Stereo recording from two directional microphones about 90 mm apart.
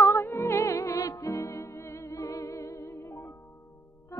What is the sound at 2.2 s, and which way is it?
Humming, 40° left (ahead or behind).